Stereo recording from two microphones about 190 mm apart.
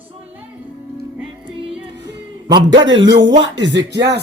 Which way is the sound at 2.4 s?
25° right (ahead or behind).